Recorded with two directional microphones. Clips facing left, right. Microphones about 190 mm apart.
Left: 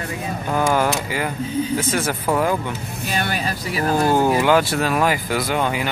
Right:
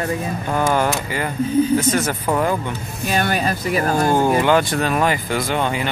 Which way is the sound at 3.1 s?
50° right (ahead or behind).